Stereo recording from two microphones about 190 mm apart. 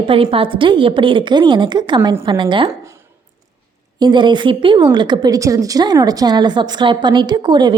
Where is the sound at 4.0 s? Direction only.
25° right (ahead or behind).